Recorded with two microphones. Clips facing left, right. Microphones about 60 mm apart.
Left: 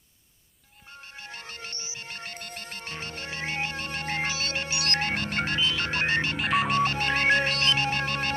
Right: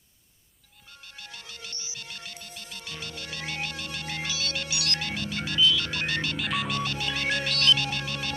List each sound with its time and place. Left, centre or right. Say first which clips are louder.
1.1 s music: left 3 dB; left